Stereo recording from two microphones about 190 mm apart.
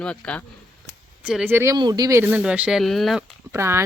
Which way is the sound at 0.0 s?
5° left (ahead or behind).